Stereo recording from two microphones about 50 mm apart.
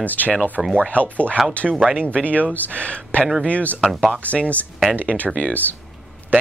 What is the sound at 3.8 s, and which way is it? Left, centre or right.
Speech, centre.